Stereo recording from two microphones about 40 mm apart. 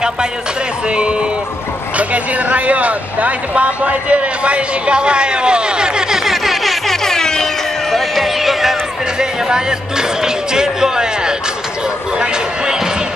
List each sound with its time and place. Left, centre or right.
0.8 s speech: right
2.0 s speech: right; by 6.3 s centre
6.3 s music: centre
7.9 s a sound: centre
9.2 s music: centre
12.2 s a sound: centre